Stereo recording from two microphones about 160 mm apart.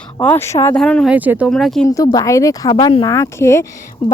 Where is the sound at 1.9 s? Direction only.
20° left (ahead or behind).